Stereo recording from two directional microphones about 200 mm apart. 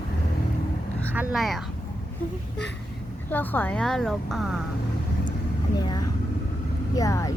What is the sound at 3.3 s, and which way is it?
Speech, 10° left (ahead or behind).